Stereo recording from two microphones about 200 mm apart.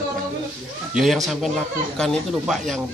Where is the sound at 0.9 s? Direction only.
Centre (ahead or behind).